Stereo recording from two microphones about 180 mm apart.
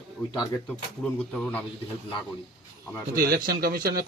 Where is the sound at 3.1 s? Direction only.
55° right (ahead or behind).